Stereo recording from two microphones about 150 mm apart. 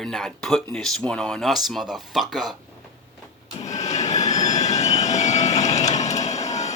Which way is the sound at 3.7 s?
50° left (ahead or behind).